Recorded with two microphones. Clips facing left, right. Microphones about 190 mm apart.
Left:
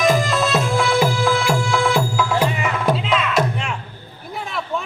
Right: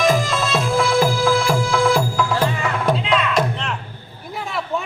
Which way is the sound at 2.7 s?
Centre (ahead or behind).